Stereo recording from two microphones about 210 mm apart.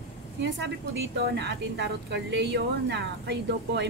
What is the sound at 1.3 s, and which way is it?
Speech, 55° right (ahead or behind).